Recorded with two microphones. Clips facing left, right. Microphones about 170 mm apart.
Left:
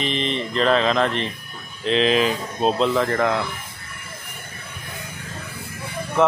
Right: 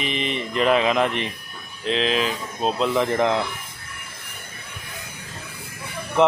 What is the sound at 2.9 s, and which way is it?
Speech, 15° right (ahead or behind).